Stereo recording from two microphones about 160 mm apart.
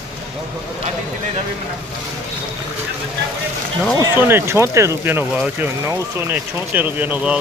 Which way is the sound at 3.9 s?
15° right (ahead or behind).